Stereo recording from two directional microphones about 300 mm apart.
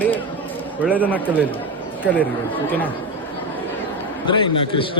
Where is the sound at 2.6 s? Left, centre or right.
Centre.